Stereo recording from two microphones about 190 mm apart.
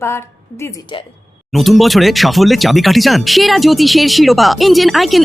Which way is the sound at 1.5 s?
Centre (ahead or behind).